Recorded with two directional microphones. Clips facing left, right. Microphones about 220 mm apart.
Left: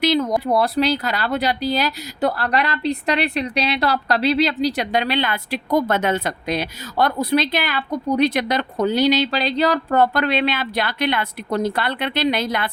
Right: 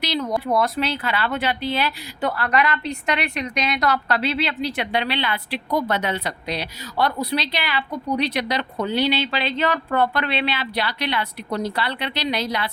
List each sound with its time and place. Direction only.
0.0 s speech: 50° left (ahead or behind)